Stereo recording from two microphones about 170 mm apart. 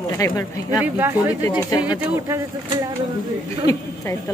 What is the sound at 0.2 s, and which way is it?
Speech, 20° left (ahead or behind).